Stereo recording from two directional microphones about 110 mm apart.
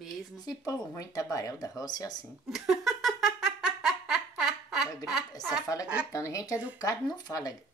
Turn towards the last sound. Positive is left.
turn(degrees=35)  # may be behind; listen again after turning